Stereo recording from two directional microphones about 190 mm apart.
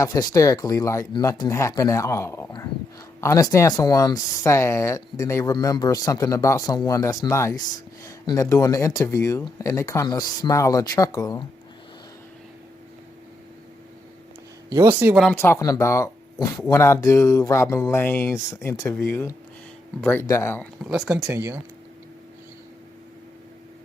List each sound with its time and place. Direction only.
0.0 s speech: 20° left (ahead or behind)
14.7 s speech: 15° right (ahead or behind)
15.2 s speech: 10° left (ahead or behind)
20.8 s speech: centre (ahead or behind)
21.2 s speech: 15° right (ahead or behind)